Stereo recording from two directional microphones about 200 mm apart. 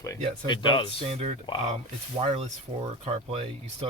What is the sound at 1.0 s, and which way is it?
Speech, 30° right (ahead or behind).